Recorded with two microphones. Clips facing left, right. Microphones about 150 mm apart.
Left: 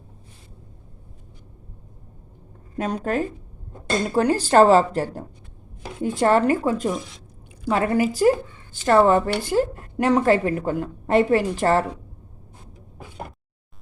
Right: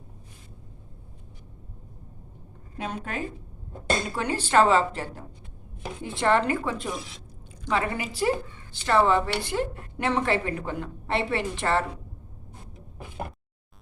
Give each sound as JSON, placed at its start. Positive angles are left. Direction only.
{"t": 2.7, "sound": "a woman's voice", "side_deg": 40}